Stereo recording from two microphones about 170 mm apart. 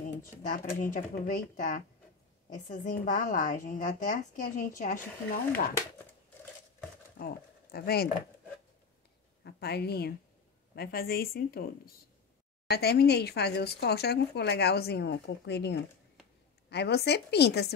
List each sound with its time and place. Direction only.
0.4 s a woman's voice: 50° left (ahead or behind)
7.2 s speech: 65° left (ahead or behind)
9.4 s a woman's voice: 75° left (ahead or behind)